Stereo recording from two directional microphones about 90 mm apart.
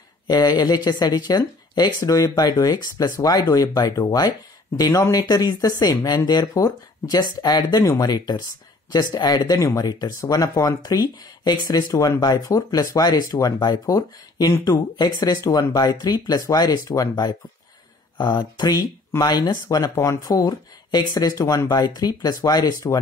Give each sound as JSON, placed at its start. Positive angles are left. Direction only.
{"t": 0.3, "sound": "speech", "side_deg": 50}